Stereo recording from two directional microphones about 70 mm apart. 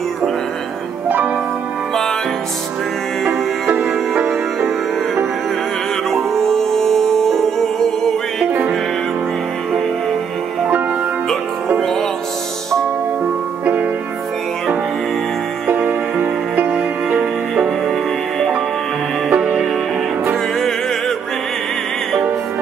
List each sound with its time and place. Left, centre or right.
6.0 s music: centre
16.6 s music: centre
19.2 s music: centre